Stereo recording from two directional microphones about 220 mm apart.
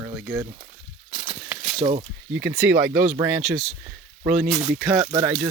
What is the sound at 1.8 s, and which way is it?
Speech, 30° right (ahead or behind).